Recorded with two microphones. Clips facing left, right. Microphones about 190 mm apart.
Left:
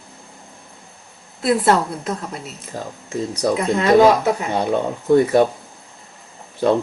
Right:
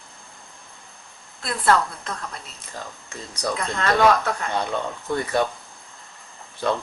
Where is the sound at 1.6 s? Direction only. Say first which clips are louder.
Left 3 dB; 25° left (ahead or behind).